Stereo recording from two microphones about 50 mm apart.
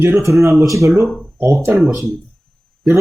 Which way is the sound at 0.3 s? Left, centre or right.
Right.